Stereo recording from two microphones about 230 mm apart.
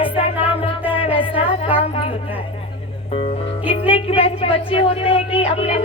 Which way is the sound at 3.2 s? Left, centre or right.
Left.